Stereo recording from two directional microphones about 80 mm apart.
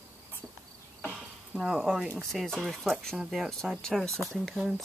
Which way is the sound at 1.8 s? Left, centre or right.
Centre.